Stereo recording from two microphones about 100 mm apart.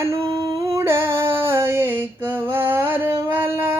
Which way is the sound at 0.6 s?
30° right (ahead or behind).